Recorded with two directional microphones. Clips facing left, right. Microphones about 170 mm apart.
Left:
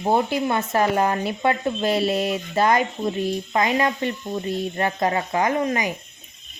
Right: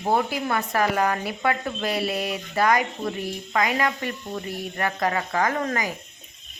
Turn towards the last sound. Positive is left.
turn(degrees=20)  # may be behind; listen again after turning